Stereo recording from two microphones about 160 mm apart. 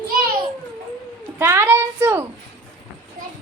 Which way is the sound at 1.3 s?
15° right (ahead or behind).